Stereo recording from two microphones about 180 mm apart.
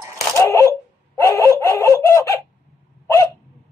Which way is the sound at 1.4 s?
15° left (ahead or behind).